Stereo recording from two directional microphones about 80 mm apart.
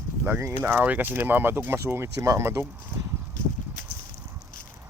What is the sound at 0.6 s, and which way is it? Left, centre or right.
Speech, right.